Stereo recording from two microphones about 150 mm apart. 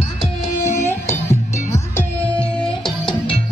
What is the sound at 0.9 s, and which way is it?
Music, 15° left (ahead or behind).